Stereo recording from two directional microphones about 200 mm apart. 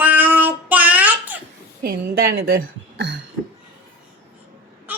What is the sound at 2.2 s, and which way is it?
Speech, 50° right (ahead or behind).